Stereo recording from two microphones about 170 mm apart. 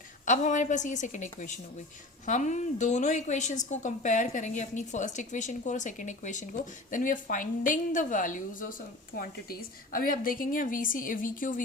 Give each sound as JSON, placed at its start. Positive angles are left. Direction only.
{"t": 0.3, "sound": "a woman's voice", "side_deg": 45}